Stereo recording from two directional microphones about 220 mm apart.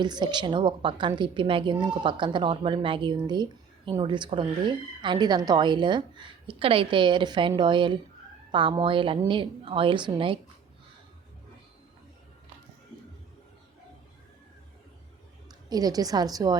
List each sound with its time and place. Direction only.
0.0 s a woman's voice: 20° right (ahead or behind)
15.4 s a woman's voice: 15° right (ahead or behind)